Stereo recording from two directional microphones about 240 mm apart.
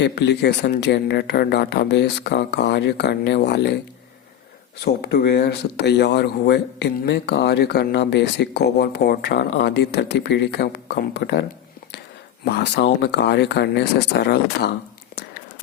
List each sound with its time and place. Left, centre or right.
0.0 s speech: left
4.9 s speech: left
12.5 s speech: left